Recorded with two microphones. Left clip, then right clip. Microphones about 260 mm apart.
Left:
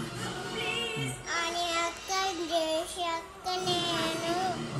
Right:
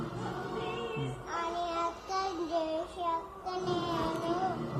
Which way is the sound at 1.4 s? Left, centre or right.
Left.